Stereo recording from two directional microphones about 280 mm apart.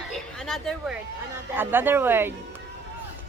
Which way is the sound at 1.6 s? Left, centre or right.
Centre.